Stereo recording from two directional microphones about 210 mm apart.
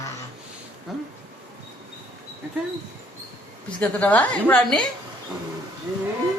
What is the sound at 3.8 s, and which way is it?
A woman's voice, 5° left (ahead or behind).